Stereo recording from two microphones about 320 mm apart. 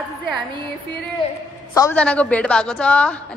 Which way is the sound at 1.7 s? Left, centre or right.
Centre.